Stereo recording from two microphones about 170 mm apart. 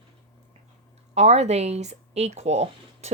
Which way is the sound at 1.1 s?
40° right (ahead or behind).